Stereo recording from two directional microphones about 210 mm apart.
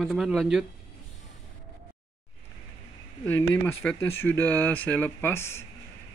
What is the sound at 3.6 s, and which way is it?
Speech, 10° left (ahead or behind).